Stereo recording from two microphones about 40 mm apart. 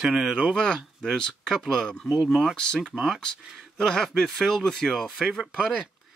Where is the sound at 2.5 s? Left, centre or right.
Centre.